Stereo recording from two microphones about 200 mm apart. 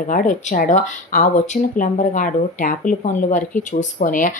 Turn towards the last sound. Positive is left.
turn(degrees=40)  # may be behind; listen again after turning